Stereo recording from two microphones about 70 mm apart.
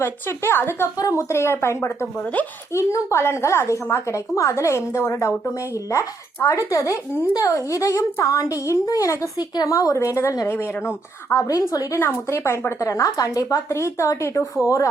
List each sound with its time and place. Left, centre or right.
0.0 s speech: left
0.9 s a woman's voice: left
11.4 s a woman's voice: left
11.9 s a woman's voice: left